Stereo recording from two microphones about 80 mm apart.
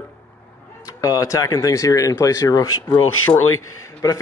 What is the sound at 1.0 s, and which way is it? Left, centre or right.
Speech, left.